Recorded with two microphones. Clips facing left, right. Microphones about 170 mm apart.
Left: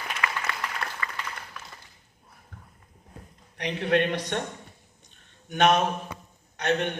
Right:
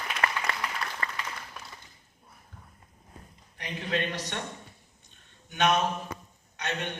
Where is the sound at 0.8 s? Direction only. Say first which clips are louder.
Left 1 dB; 55° left (ahead or behind).